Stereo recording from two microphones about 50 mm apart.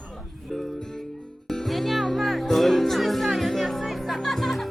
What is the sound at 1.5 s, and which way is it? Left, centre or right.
Music, centre.